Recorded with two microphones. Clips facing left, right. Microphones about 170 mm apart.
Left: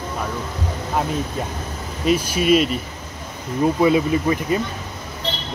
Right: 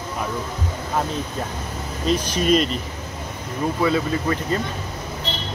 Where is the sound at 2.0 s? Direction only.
10° left (ahead or behind).